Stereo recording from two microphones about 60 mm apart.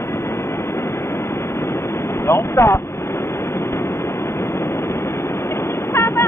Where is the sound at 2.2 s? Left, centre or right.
Left.